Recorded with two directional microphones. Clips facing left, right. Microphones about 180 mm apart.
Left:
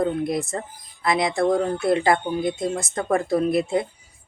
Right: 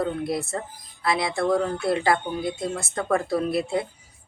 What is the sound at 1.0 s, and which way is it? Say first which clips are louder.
A woman's voice: left 3 dB; 20° left (ahead or behind).